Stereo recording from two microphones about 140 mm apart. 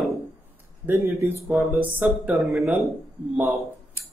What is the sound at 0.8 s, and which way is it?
Speech, 15° right (ahead or behind).